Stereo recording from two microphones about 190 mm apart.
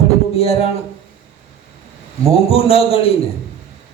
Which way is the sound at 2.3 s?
30° left (ahead or behind).